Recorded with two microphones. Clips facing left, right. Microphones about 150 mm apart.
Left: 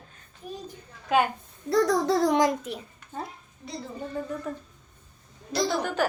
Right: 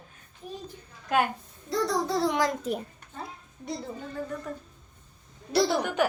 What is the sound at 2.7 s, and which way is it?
Speech, 40° right (ahead or behind).